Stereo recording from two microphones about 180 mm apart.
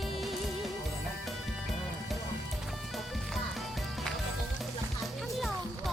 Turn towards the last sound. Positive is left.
turn(degrees=0)  # may be behind; listen again after turning